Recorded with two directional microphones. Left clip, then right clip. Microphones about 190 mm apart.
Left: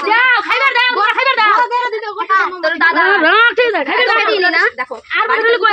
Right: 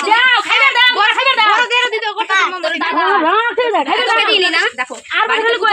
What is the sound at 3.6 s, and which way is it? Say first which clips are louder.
Speech: even; 35° right (ahead or behind).